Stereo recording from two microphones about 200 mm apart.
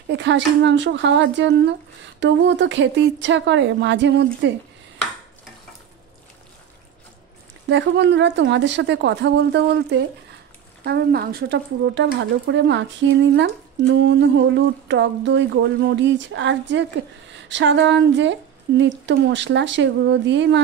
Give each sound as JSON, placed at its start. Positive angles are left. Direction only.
{"t": 0.1, "sound": "speech", "side_deg": -60}
{"t": 7.6, "sound": "speech", "side_deg": -60}